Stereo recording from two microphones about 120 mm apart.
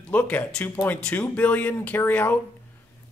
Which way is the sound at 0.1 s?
15° left (ahead or behind).